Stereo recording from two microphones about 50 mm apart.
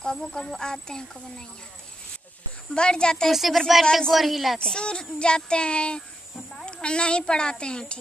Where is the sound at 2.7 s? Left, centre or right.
Centre.